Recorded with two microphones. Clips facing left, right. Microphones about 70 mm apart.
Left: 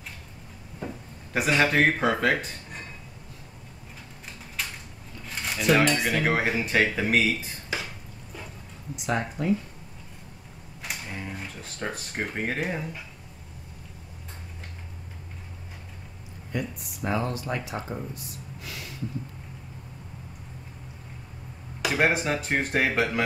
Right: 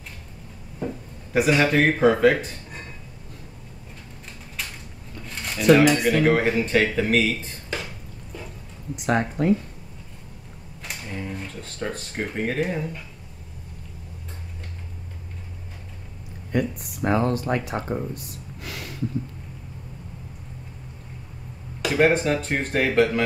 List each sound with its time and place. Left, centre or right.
1.3 s speech: centre
4.6 s a sound: centre
5.3 s speech: centre
8.9 s speech: right
10.8 s speech: centre
16.5 s speech: right
21.8 s speech: centre